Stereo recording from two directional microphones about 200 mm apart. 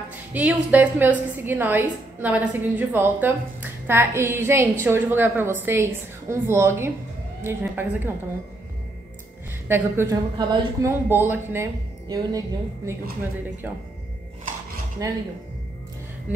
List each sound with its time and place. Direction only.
0.3 s a woman's voice: 10° right (ahead or behind)
9.7 s a woman's voice: 10° right (ahead or behind)
15.0 s a woman's voice: 15° right (ahead or behind)